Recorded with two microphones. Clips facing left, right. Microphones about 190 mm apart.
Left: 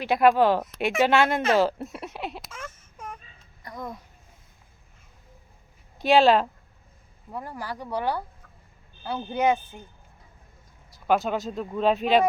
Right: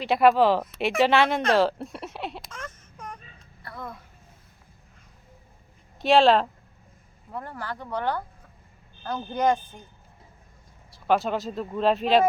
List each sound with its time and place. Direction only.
0.0 s speech: centre (ahead or behind)
3.6 s a sound: 15° left (ahead or behind)
6.0 s speech: centre (ahead or behind)
10.9 s speech: centre (ahead or behind)